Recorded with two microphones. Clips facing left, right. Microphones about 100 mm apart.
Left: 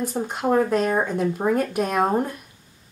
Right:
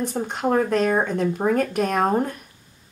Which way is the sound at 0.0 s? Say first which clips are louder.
Even; 5° left (ahead or behind).